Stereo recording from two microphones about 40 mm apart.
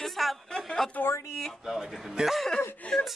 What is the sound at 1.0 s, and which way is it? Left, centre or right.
Speech, left.